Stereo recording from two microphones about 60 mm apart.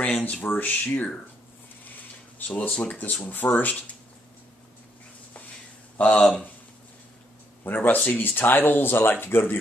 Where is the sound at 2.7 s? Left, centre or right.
Centre.